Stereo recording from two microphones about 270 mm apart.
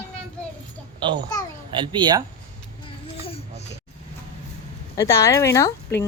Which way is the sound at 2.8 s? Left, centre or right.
Left.